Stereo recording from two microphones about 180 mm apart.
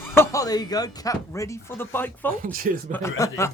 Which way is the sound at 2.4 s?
50° right (ahead or behind).